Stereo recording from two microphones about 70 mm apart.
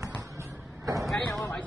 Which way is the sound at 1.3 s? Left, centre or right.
Left.